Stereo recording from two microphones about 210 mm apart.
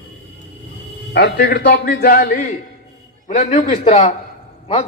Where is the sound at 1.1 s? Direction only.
50° left (ahead or behind).